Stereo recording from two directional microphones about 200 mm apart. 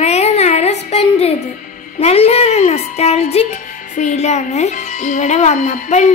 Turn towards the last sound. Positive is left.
turn(degrees=35)  # may be behind; listen again after turning